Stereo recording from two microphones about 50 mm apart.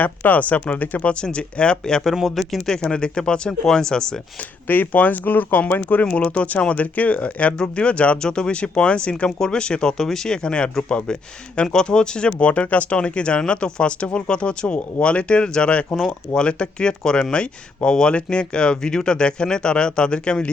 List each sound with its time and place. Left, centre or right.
0.0 s speech: left
1.2 s speech: left
2.2 s speech: centre
2.6 s speech: centre
4.7 s speech: left
6.1 s speech: left